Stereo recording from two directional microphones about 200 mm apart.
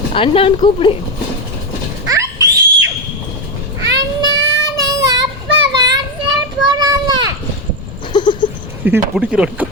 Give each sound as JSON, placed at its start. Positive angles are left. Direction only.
{"t": 0.1, "sound": "speech", "side_deg": 25}
{"t": 2.0, "sound": "a sound", "side_deg": -15}
{"t": 3.9, "sound": "child singing", "side_deg": -20}
{"t": 6.6, "sound": "children playing", "side_deg": -20}
{"t": 8.1, "sound": "a sound", "side_deg": 25}
{"t": 8.8, "sound": "speech", "side_deg": -5}